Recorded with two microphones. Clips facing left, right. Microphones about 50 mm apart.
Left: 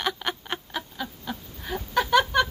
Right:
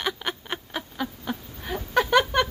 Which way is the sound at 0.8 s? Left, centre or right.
Centre.